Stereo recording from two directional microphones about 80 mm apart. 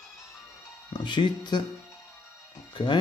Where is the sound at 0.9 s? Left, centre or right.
Left.